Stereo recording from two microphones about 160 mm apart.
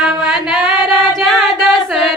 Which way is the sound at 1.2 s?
Centre (ahead or behind).